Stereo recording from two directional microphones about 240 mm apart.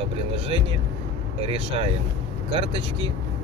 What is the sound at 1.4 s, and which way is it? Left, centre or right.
Speech, right.